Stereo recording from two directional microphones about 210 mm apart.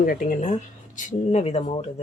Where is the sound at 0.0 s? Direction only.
40° left (ahead or behind).